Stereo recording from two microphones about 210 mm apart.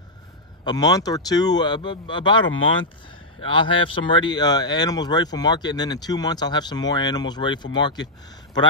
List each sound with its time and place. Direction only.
0.7 s speech: 20° left (ahead or behind)
3.4 s speech: 25° left (ahead or behind)